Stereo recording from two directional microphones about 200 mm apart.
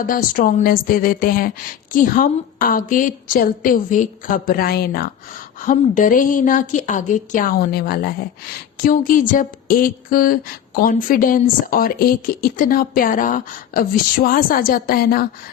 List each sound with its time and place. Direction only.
0.0 s speech: 45° left (ahead or behind)